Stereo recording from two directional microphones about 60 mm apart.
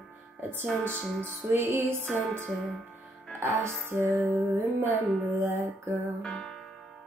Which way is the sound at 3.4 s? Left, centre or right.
Right.